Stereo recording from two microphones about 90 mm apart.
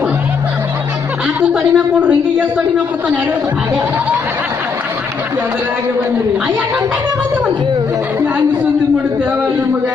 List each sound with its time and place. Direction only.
1.4 s speech: 15° right (ahead or behind)